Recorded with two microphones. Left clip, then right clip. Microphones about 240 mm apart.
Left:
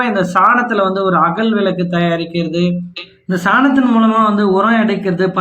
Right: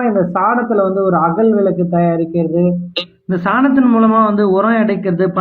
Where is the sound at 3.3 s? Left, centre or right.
Centre.